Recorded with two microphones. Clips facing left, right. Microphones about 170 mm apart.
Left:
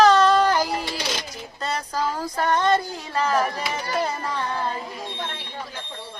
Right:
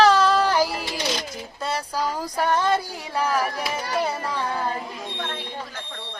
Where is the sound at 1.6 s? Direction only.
10° right (ahead or behind).